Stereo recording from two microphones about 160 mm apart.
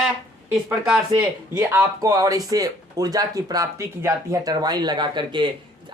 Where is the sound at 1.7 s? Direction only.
20° right (ahead or behind).